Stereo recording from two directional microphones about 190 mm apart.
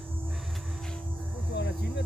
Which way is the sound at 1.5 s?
60° left (ahead or behind).